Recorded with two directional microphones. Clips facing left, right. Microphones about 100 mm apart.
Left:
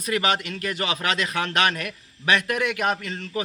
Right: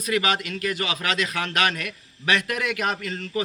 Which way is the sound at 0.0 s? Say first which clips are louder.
Even; 35° left (ahead or behind).